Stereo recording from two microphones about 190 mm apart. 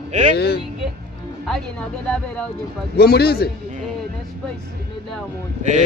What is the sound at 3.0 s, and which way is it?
Speech, 55° left (ahead or behind).